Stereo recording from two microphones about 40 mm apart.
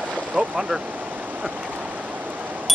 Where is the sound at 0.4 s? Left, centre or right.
Centre.